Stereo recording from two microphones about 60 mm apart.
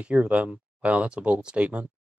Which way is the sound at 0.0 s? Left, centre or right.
Right.